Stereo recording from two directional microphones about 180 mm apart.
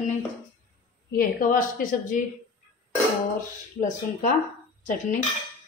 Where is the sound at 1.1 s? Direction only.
55° left (ahead or behind).